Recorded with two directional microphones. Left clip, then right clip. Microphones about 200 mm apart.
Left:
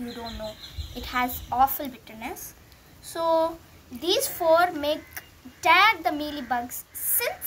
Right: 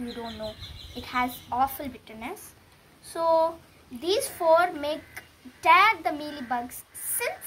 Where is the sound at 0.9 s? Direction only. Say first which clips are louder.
Left 1 dB; 5° left (ahead or behind).